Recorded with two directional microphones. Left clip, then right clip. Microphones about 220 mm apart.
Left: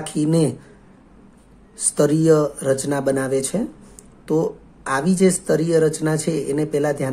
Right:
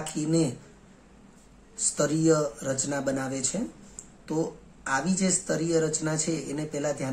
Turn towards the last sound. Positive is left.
turn(degrees=35)  # may be behind; listen again after turning